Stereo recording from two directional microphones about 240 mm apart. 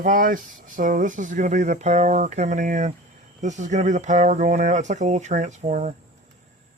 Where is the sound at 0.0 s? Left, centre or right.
Right.